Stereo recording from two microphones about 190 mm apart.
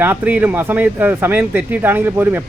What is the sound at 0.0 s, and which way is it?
Speech, 10° right (ahead or behind).